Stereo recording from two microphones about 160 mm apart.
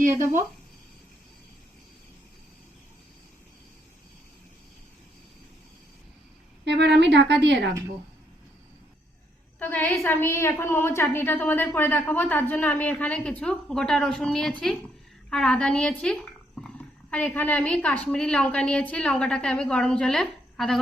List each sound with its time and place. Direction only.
6.7 s speech: 90° right
9.6 s a woman's voice: 10° left (ahead or behind)